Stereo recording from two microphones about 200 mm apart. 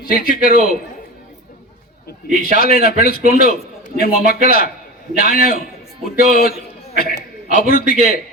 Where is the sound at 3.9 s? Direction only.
50° left (ahead or behind).